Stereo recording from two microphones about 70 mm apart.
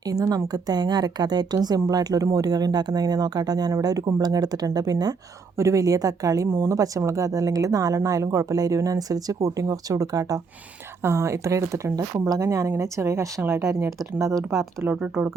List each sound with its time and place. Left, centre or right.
0.1 s a woman's voice: right
3.7 s a woman's voice: right
5.5 s a woman's voice: right
6.5 s speech: right
6.7 s a woman's voice: right
11.0 s speech: right
15.0 s speech: right